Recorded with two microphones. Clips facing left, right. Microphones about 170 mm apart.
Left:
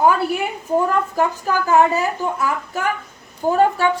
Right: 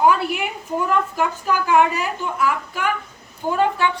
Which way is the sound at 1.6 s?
40° left (ahead or behind).